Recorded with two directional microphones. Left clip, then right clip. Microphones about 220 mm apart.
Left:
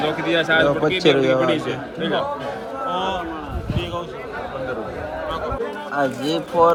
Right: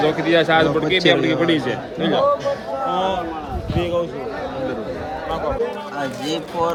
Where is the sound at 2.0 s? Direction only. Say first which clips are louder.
Right 4 dB; 40° right (ahead or behind).